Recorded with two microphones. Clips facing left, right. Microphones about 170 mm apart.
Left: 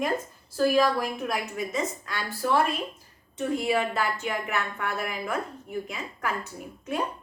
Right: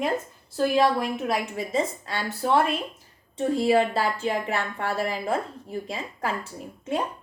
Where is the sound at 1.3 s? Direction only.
30° right (ahead or behind).